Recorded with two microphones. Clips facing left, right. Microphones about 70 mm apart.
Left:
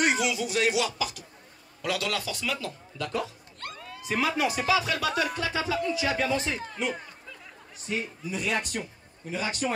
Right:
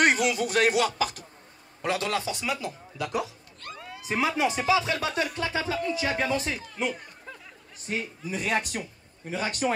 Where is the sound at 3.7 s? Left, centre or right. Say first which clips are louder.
Even; centre.